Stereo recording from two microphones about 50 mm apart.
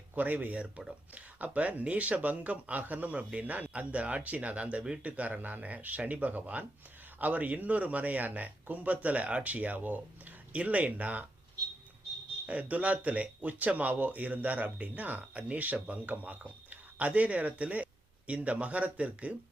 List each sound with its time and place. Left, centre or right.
0.1 s speech: right
12.5 s speech: right